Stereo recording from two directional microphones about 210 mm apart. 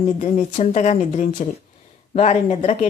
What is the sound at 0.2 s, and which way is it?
A woman's voice, 35° left (ahead or behind).